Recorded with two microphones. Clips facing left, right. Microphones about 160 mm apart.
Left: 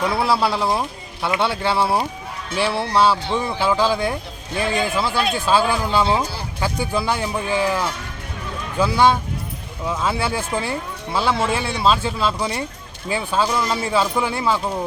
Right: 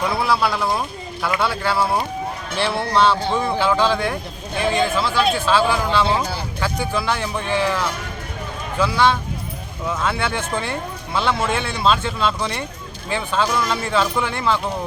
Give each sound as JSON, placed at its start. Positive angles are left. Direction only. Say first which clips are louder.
{"t": 0.2, "sound": "speech", "louder": "left 1 dB", "side_deg": 30}
{"t": 2.6, "sound": "a man's voice", "louder": "even", "side_deg": 10}
{"t": 8.8, "sound": "a man's voice", "louder": "left 2 dB", "side_deg": 15}